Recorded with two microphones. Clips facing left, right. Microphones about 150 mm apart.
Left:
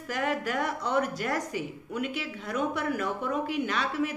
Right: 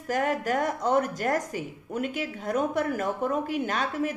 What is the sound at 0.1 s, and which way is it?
A woman's voice, 45° right (ahead or behind).